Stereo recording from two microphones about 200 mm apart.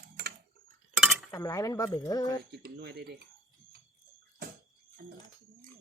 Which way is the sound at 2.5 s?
55° right (ahead or behind).